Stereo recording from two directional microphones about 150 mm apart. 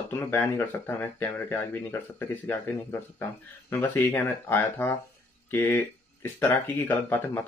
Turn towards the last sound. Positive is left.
turn(degrees=10)  # may be behind; listen again after turning